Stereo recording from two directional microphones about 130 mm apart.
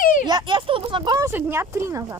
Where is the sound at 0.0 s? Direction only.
90° left.